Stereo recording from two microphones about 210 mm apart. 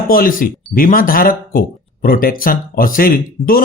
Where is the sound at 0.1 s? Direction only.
45° left (ahead or behind).